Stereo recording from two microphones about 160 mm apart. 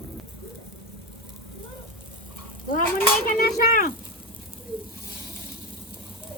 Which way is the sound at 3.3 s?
60° left (ahead or behind).